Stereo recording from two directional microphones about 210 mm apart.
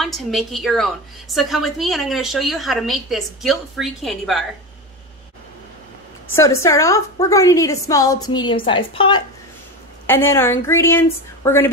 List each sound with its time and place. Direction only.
0.0 s a woman's voice: centre (ahead or behind)
6.3 s a woman's voice: 15° left (ahead or behind)
10.0 s a woman's voice: 10° left (ahead or behind)